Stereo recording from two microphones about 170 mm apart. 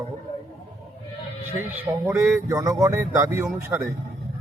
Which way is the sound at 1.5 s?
10° right (ahead or behind).